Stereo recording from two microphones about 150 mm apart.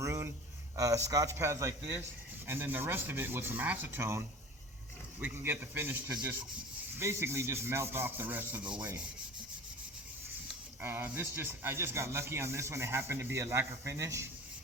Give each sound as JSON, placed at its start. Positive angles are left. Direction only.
{"t": 0.0, "sound": "a sound", "side_deg": -20}
{"t": 0.8, "sound": "a man's voice", "side_deg": -20}
{"t": 5.2, "sound": "speech", "side_deg": -15}
{"t": 10.8, "sound": "speech", "side_deg": -15}